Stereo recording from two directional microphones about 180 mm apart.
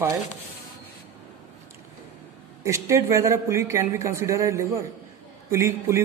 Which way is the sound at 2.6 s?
15° right (ahead or behind).